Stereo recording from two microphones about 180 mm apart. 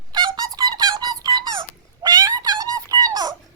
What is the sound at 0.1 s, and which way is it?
Squeak, 25° right (ahead or behind).